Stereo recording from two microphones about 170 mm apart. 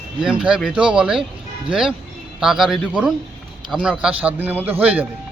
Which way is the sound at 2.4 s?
5° right (ahead or behind).